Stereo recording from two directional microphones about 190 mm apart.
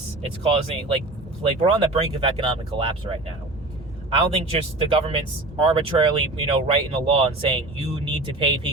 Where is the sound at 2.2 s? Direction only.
30° right (ahead or behind).